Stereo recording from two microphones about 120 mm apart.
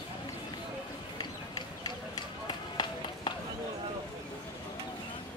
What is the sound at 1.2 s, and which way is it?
Run, 35° left (ahead or behind).